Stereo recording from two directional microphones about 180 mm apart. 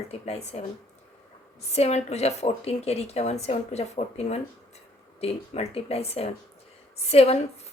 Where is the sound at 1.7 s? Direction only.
35° left (ahead or behind).